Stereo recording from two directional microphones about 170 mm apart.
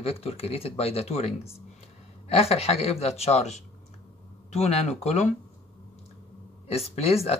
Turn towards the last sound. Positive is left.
turn(degrees=35)  # may be behind; listen again after turning